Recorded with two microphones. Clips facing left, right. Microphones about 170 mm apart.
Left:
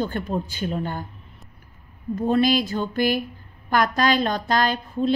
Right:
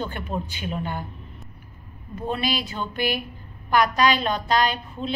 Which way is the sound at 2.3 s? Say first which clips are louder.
Left 7 dB; 45° left (ahead or behind).